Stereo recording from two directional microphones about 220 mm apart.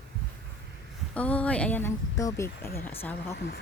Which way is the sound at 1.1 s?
5° left (ahead or behind).